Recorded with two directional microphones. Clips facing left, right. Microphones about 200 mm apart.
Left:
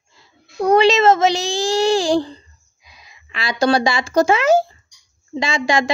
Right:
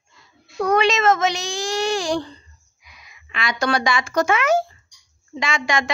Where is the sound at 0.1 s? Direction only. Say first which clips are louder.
Left 1 dB; 30° left (ahead or behind).